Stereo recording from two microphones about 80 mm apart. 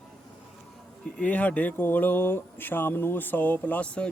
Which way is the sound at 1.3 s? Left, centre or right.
Left.